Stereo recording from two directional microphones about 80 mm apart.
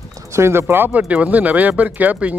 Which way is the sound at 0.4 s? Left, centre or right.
Right.